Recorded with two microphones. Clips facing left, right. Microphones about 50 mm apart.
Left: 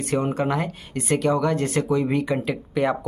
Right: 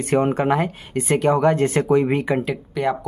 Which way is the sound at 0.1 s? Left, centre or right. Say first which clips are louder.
Right 5 dB; right.